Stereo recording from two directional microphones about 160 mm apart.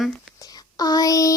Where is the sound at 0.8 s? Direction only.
20° left (ahead or behind).